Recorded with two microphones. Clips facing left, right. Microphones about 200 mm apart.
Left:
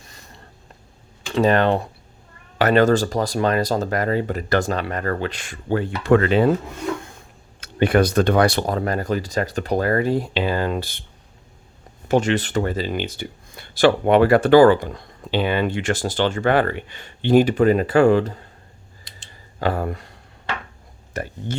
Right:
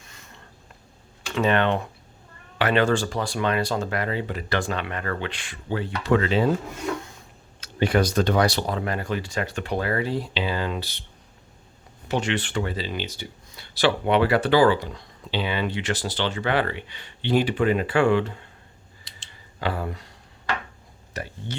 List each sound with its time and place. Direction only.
0.0 s a sound: 35° left (ahead or behind)
1.4 s speech: 40° left (ahead or behind); by 6.5 s 55° left (ahead or behind)
7.6 s speech: 60° left (ahead or behind)
12.0 s speech: 45° left (ahead or behind)
19.5 s speech: 45° left (ahead or behind)
21.1 s speech: 50° left (ahead or behind)